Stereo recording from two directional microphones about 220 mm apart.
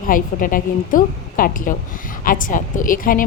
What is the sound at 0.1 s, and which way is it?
A woman's voice, 40° left (ahead or behind).